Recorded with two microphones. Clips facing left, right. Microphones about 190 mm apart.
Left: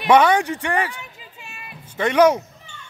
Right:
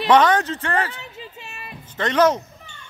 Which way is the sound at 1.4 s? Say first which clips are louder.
Right 2 dB; 40° right (ahead or behind).